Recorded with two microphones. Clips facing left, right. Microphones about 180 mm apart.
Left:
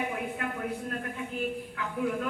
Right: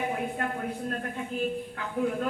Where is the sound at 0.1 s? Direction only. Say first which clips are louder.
Right 3 dB; 40° right (ahead or behind).